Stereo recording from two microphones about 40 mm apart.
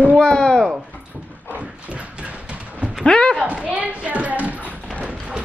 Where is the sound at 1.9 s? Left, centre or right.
Right.